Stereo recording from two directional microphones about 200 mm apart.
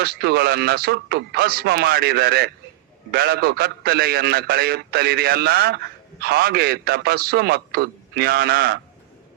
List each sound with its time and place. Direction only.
0.0 s a man's voice: 50° right (ahead or behind)